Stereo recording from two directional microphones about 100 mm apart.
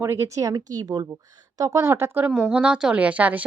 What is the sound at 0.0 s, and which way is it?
A woman's voice, 30° right (ahead or behind).